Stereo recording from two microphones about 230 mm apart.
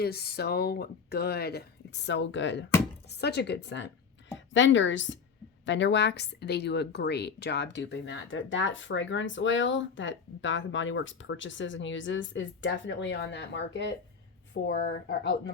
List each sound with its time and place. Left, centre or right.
0.0 s a woman's voice: left